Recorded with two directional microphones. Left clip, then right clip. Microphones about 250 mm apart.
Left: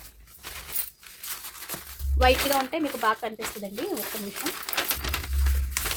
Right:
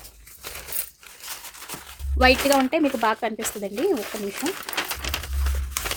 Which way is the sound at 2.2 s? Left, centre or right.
Right.